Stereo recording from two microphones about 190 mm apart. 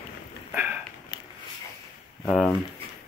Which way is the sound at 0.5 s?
10° right (ahead or behind).